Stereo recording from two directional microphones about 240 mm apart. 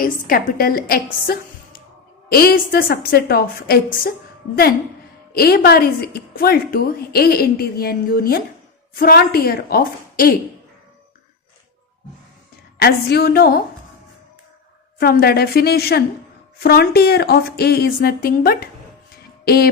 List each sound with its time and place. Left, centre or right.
0.0 s a woman's voice: left
5.3 s a woman's voice: left
12.8 s a woman's voice: left
14.9 s a woman's voice: left